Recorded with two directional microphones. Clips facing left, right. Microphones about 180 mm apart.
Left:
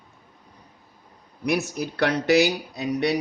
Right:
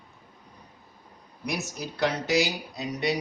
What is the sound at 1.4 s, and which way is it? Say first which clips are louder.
Speech: left 8 dB; 60° left (ahead or behind).